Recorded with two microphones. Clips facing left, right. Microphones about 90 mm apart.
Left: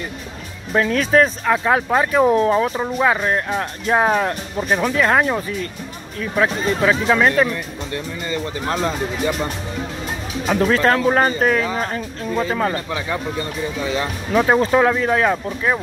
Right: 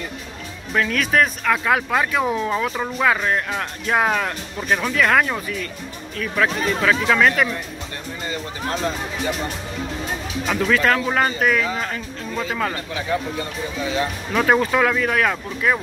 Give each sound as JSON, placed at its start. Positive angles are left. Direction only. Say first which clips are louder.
{"t": 0.7, "sound": "speech", "louder": "left 4 dB", "side_deg": 30}
{"t": 2.8, "sound": "speech", "louder": "left 2 dB", "side_deg": 20}
{"t": 10.5, "sound": "speech", "louder": "left 3 dB", "side_deg": 35}
{"t": 14.3, "sound": "speech", "louder": "left 2 dB", "side_deg": 15}
{"t": 14.6, "sound": "speech", "louder": "left 3 dB", "side_deg": 30}